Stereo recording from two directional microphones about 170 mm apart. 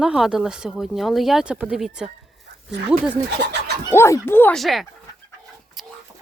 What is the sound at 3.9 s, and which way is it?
Speech, 15° left (ahead or behind).